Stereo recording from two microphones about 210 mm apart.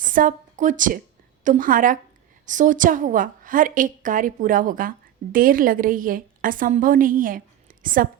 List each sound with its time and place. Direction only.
0.0 s a woman's voice: 40° right (ahead or behind)